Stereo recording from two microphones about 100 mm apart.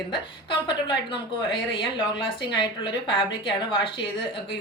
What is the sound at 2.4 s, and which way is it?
Speech, 55° left (ahead or behind).